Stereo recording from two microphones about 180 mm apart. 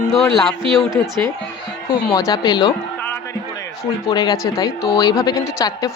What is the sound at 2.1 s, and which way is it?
Speech, 20° left (ahead or behind).